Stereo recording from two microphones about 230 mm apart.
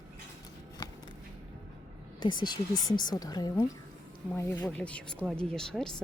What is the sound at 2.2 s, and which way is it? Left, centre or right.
A woman's voice, centre.